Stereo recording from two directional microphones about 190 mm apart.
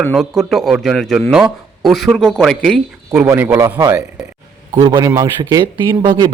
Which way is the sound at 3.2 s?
10° right (ahead or behind).